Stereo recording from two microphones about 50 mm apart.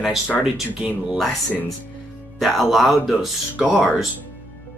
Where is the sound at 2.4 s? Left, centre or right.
Centre.